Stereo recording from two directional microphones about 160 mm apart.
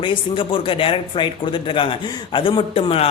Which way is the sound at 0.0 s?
35° left (ahead or behind).